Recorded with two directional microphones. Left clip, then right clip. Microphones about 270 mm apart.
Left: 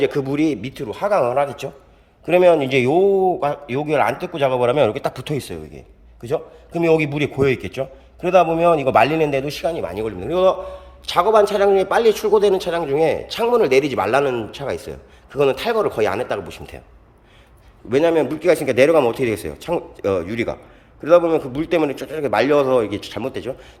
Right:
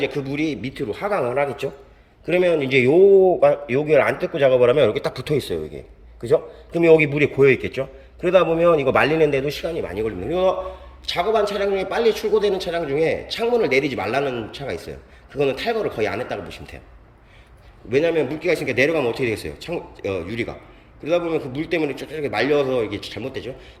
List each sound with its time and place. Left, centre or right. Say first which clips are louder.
0.0 s a man's voice: left 5 dB; centre
0.7 s a man's voice: left 4 dB; centre
6.7 s a man's voice: right 3 dB; centre
17.9 s a man's voice: left 3 dB; centre